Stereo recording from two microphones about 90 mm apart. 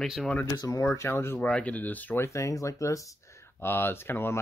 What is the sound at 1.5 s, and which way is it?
Speech, 15° left (ahead or behind).